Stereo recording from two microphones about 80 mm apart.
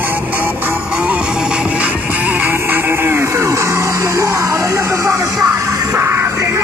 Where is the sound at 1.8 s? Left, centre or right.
Right.